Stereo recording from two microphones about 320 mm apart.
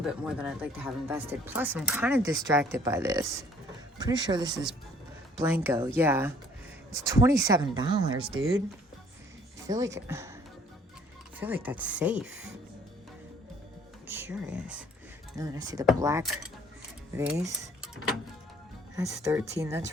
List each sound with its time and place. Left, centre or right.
0.0 s speech: centre
8.2 s speech: right
9.6 s speech: centre
11.3 s speech: centre
14.1 s speech: centre